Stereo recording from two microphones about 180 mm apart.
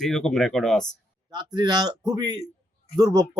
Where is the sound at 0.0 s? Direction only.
5° left (ahead or behind).